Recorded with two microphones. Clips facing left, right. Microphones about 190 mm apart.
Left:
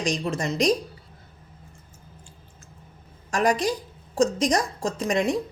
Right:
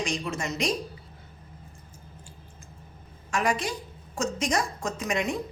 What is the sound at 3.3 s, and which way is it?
A woman's voice, 40° left (ahead or behind).